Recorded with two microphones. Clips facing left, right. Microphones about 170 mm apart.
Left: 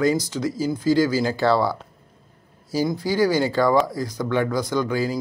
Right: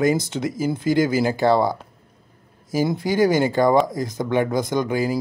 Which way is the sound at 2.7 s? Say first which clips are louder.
Right 2 dB; 20° right (ahead or behind).